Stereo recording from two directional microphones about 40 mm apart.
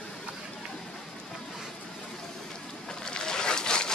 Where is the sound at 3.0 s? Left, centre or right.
Centre.